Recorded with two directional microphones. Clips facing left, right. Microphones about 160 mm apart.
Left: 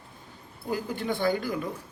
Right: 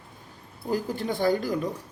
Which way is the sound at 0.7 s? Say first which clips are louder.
Right 2 dB; 40° right (ahead or behind).